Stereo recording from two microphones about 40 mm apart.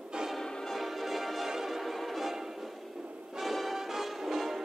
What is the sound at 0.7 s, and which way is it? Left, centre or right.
Music, centre.